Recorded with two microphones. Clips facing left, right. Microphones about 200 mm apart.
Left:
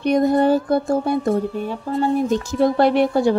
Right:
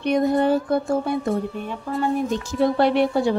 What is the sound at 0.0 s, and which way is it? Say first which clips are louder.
A woman's voice: left 3 dB; 40° left (ahead or behind).